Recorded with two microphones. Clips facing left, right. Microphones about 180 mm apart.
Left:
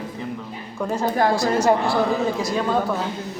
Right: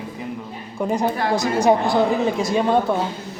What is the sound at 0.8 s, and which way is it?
A woman's voice, 15° right (ahead or behind).